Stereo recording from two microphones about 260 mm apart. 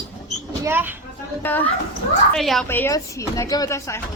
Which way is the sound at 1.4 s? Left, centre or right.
Centre.